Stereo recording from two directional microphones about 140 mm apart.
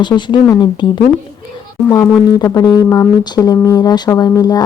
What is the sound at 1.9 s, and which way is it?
Speech, 25° left (ahead or behind).